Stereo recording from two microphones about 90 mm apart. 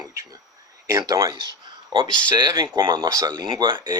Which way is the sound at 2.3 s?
50° right (ahead or behind).